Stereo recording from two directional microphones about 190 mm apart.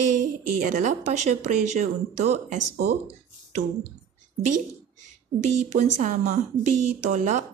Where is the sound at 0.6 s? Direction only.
45° right (ahead or behind).